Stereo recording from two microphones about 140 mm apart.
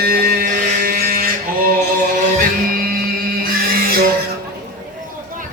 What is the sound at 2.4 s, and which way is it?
Music, 90° right.